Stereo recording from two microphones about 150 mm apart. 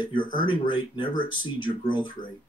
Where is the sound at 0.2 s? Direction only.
60° left (ahead or behind).